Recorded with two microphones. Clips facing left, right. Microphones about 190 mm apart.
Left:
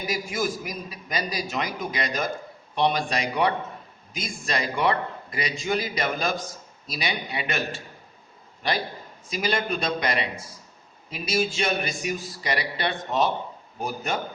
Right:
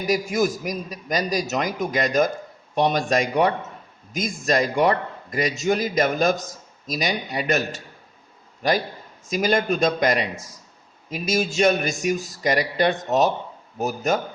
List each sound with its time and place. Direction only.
0.0 s a man's voice: 45° right (ahead or behind)